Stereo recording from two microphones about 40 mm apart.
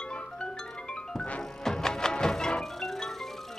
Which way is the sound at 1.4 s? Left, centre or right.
Centre.